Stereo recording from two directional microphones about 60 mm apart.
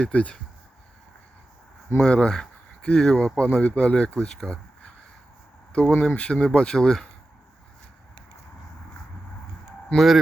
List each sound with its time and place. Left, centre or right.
0.0 s speech: left
2.0 s speech: centre
5.9 s speech: centre
9.9 s speech: centre